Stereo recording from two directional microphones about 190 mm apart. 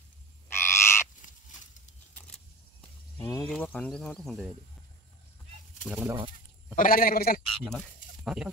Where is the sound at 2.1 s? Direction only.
5° left (ahead or behind).